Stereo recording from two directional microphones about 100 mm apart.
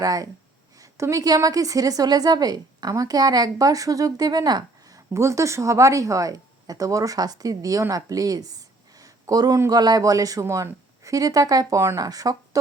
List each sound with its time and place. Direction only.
0.0 s a woman's voice: 40° right (ahead or behind)